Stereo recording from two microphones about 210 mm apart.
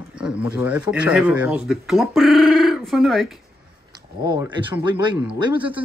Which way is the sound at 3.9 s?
20° right (ahead or behind).